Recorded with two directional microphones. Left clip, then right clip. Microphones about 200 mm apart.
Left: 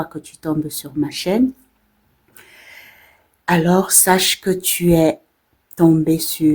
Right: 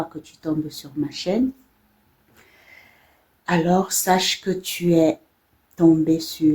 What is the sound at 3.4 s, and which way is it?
Speech, 45° left (ahead or behind).